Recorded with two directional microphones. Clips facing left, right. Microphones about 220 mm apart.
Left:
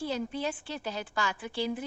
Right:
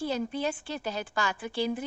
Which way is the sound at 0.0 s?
45° right (ahead or behind).